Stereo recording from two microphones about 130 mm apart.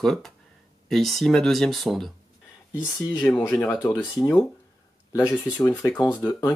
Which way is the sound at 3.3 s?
15° left (ahead or behind).